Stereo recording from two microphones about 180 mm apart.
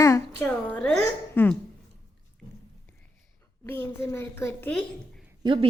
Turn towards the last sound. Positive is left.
turn(degrees=-30)  # may be behind; listen again after turning